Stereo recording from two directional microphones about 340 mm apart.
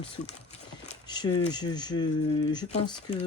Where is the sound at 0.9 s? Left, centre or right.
Centre.